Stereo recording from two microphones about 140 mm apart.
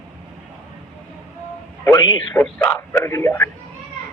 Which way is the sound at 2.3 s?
10° left (ahead or behind).